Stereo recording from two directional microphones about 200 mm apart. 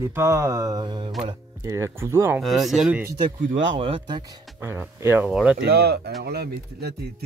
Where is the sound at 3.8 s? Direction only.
25° right (ahead or behind).